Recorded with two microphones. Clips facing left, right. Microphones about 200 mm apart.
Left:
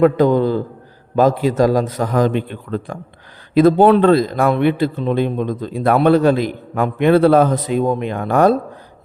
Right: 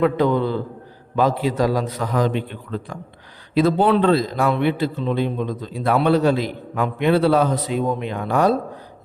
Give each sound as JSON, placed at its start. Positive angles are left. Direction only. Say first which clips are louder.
{"t": 0.0, "sound": "a man's voice", "louder": "left 5 dB", "side_deg": 45}